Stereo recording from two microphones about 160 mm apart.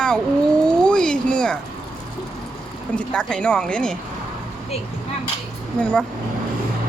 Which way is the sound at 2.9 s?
5° left (ahead or behind).